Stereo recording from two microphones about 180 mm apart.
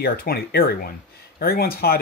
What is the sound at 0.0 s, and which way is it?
Speech, 55° left (ahead or behind).